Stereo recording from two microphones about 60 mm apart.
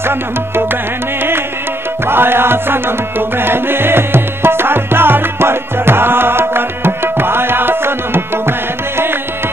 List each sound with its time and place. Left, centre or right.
2.0 s music: right